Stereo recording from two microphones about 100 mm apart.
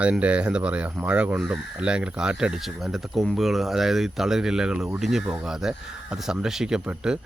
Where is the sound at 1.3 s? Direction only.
5° right (ahead or behind).